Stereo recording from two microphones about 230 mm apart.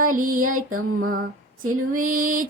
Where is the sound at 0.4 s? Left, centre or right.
Right.